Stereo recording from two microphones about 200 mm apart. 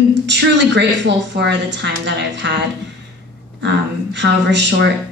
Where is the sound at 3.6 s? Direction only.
60° right (ahead or behind).